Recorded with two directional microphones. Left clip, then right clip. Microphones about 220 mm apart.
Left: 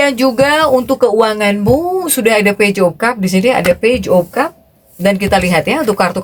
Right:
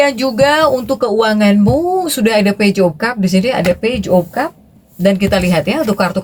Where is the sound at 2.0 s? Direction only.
30° left (ahead or behind).